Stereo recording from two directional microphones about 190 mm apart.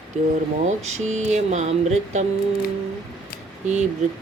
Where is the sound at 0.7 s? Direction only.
35° right (ahead or behind).